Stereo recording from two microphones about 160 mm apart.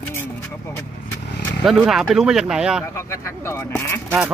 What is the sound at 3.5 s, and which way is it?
Speech, 15° left (ahead or behind).